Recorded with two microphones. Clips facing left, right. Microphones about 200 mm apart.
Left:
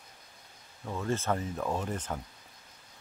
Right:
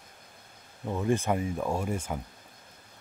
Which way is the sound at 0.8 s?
15° right (ahead or behind).